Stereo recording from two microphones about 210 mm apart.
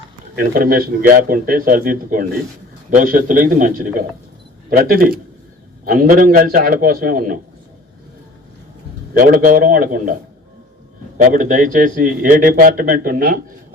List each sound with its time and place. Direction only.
0.5 s a man's voice: 45° right (ahead or behind)
9.1 s a man's voice: 40° right (ahead or behind)
11.2 s a man's voice: 40° right (ahead or behind)